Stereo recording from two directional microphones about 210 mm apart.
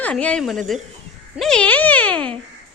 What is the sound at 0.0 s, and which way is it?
A woman's voice, 5° left (ahead or behind).